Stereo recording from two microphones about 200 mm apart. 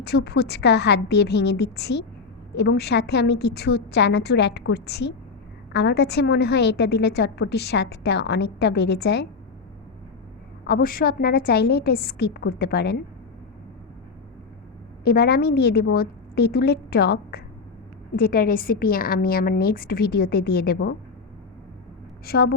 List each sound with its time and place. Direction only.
0.0 s a woman's voice: 55° left (ahead or behind)
10.7 s a woman's voice: 45° left (ahead or behind)
15.0 s a woman's voice: 50° left (ahead or behind)
22.3 s a woman's voice: 50° left (ahead or behind)